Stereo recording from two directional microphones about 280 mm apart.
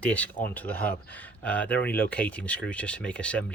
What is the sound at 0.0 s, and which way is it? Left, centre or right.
Speech, centre.